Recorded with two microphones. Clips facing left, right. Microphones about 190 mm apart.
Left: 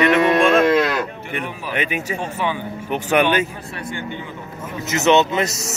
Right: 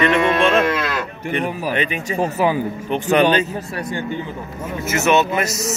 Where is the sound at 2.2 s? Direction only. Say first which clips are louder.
Right 6 dB; 35° right (ahead or behind).